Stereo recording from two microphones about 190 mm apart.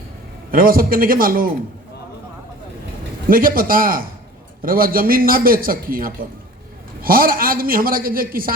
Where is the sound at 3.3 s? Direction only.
50° right (ahead or behind).